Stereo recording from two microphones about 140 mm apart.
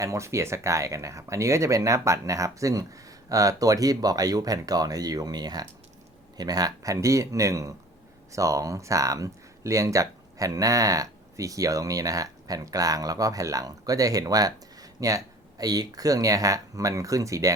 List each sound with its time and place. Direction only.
0.0 s speech: 20° right (ahead or behind)